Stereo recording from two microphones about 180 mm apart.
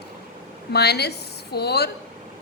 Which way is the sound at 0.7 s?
65° left (ahead or behind).